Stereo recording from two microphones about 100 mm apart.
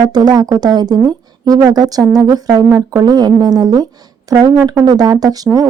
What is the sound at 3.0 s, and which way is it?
Speech, 45° right (ahead or behind).